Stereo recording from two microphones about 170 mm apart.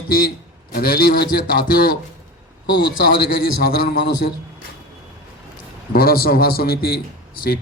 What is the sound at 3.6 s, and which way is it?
Speech, 60° left (ahead or behind).